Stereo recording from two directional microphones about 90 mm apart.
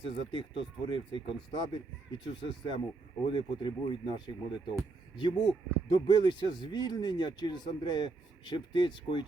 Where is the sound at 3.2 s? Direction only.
65° left (ahead or behind).